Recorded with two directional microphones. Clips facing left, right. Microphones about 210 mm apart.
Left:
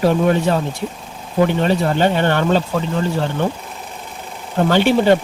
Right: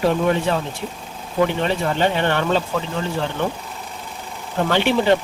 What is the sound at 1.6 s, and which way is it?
Speech, 45° left (ahead or behind).